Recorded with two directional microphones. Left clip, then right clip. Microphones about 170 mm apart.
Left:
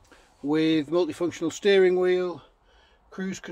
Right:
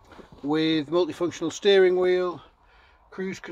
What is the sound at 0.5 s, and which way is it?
Speech, 10° left (ahead or behind).